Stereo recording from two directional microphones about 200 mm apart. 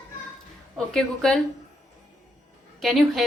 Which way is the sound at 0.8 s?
5° left (ahead or behind).